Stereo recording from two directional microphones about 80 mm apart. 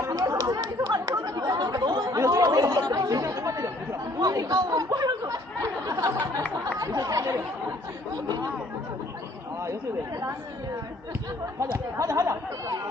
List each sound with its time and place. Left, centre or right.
0.0 s chatter: right
2.2 s chatter: right
5.5 s a sound: right
6.7 s chatter: right
8.1 s chatter: right
11.6 s a sound: right